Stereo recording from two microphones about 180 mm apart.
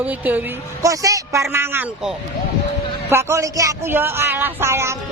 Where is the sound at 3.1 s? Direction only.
15° right (ahead or behind).